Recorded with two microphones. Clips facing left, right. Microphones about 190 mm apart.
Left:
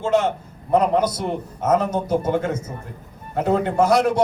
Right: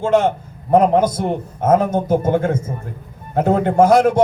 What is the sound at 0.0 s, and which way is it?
A man's voice, 50° right (ahead or behind).